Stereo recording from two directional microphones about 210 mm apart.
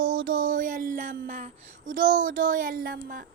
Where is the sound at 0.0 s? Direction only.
65° right (ahead or behind).